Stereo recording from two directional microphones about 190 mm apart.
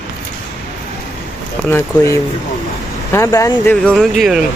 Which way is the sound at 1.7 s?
15° left (ahead or behind).